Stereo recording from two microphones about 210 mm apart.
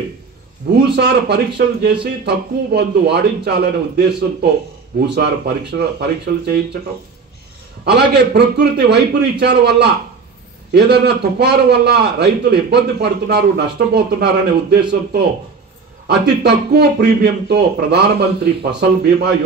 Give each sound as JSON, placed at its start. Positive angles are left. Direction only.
{"t": 0.8, "sound": "a man's voice", "side_deg": -50}
{"t": 7.8, "sound": "a man's voice", "side_deg": -50}
{"t": 16.1, "sound": "a man's voice", "side_deg": -50}